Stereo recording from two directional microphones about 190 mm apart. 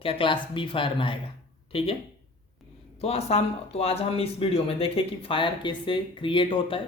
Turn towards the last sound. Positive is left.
turn(degrees=25)  # may be behind; listen again after turning